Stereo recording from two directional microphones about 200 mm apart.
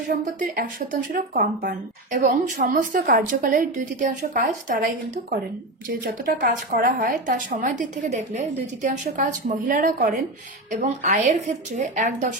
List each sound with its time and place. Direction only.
0.1 s speech: 45° right (ahead or behind)